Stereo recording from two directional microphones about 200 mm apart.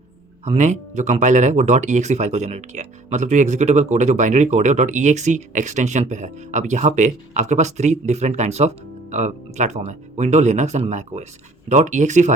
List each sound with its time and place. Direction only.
0.4 s speech: 35° right (ahead or behind)